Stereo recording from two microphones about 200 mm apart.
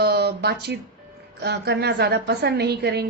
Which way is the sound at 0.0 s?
55° right (ahead or behind).